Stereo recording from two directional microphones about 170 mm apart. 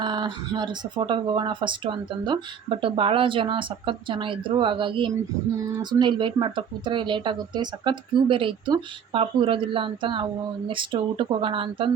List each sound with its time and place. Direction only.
0.0 s speech: 25° right (ahead or behind)